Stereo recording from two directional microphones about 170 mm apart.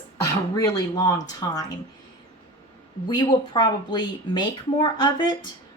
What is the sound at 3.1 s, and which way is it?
Speech, 25° left (ahead or behind).